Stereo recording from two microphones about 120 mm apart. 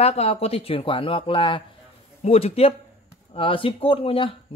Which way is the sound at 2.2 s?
55° left (ahead or behind).